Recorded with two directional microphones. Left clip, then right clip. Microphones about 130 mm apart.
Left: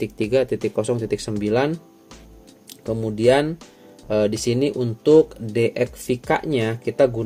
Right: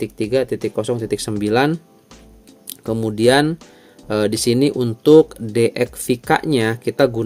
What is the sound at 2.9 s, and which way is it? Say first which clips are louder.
Speech: right 2 dB; 50° right (ahead or behind).